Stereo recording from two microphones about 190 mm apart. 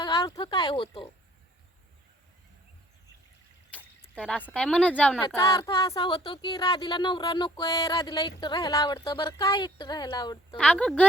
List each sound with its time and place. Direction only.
0.0 s speech: 20° left (ahead or behind)
3.7 s a sound: 5° left (ahead or behind)
4.1 s speech: 5° left (ahead or behind)
5.4 s speech: 20° left (ahead or behind)
10.6 s speech: 5° left (ahead or behind)